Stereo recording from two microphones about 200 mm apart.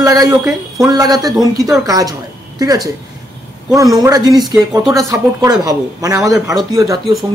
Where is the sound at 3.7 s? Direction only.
15° right (ahead or behind).